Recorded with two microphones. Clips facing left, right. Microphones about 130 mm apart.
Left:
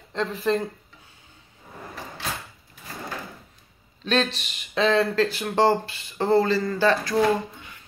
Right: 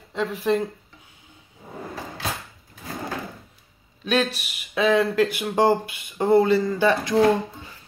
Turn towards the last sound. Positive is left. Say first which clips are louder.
# right 2 dB
turn(degrees=-20)  # may be behind; listen again after turning